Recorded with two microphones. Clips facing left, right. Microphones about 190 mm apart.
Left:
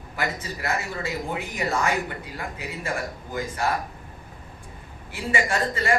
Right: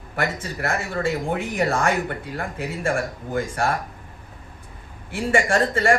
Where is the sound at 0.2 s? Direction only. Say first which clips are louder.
Right 4 dB; 50° right (ahead or behind).